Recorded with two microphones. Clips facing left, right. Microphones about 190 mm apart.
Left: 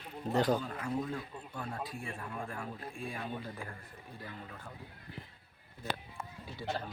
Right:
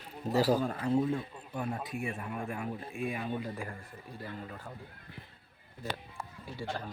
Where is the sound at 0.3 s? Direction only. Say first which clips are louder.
Right 3 dB; 5° right (ahead or behind).